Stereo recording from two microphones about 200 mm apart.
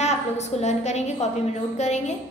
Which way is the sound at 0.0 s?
35° left (ahead or behind).